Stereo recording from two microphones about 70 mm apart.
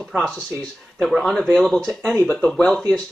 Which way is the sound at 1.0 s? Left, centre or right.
Centre.